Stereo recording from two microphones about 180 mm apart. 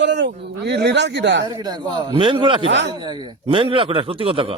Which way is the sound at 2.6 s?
90° right.